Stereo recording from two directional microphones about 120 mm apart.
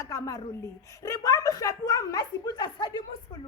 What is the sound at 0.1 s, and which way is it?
A woman's voice, 30° left (ahead or behind).